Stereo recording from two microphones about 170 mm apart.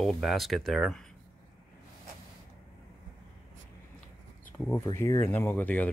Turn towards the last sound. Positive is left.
turn(degrees=10)  # may be behind; listen again after turning